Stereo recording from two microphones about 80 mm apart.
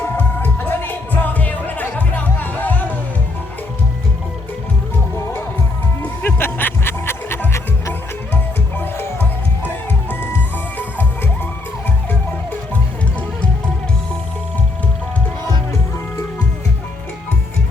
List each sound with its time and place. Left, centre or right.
0.0 s music: left
6.0 s music: left
12.7 s music: centre